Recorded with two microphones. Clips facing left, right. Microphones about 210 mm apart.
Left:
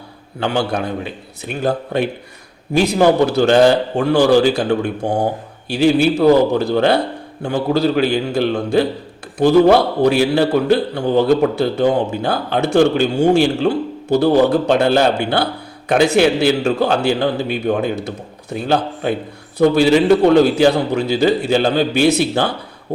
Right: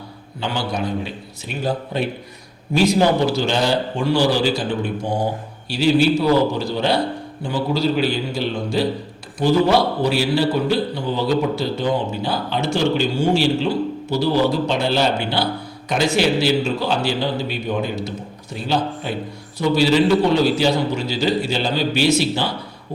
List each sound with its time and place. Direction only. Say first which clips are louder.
0.3 s a man's voice: left 5 dB; 55° left (ahead or behind)
5.8 s a man's voice: left 4 dB; 50° left (ahead or behind)